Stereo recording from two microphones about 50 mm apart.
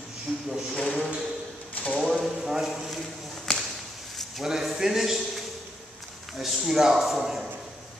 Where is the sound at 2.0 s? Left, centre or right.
Centre.